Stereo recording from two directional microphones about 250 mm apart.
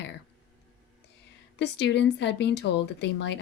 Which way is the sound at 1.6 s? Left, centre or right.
Left.